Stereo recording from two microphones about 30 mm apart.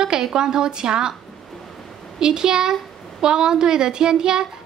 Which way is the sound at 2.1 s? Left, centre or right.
Right.